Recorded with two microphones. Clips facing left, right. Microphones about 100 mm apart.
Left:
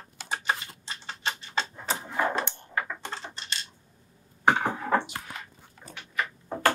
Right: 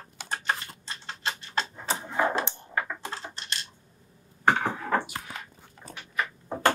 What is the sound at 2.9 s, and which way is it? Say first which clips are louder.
Typing: right 1 dB; 5° right (ahead or behind).